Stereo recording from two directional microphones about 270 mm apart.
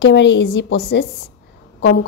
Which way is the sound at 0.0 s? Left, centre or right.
Left.